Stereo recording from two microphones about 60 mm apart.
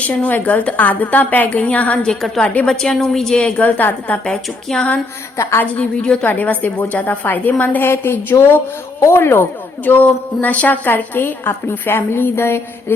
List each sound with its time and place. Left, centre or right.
0.1 s a woman's voice: left
2.0 s a woman's voice: centre
3.6 s a woman's voice: left
4.3 s a woman's voice: centre
5.4 s a woman's voice: left
5.7 s a woman's voice: centre
6.2 s a woman's voice: left
9.8 s a woman's voice: left